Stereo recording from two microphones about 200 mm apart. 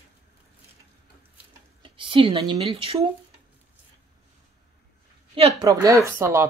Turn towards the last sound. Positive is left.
turn(degrees=-15)  # may be behind; listen again after turning